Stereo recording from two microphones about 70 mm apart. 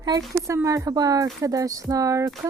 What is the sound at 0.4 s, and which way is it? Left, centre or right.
Speech, right.